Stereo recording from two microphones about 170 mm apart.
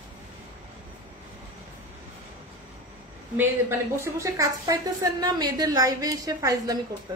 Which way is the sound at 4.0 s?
20° right (ahead or behind).